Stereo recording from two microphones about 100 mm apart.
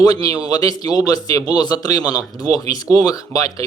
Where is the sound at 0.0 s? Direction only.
40° left (ahead or behind).